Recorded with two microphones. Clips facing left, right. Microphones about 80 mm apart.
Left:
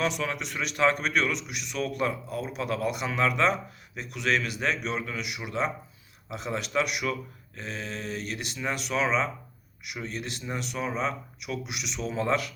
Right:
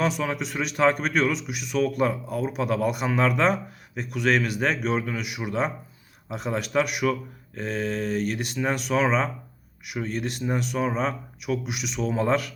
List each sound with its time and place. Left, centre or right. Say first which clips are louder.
0.0 s speech: right 4 dB; right